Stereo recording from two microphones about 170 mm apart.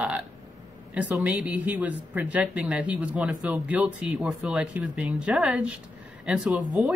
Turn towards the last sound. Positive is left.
turn(degrees=0)  # may be behind; listen again after turning